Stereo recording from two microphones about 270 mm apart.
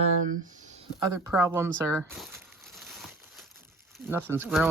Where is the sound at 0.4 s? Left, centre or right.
Right.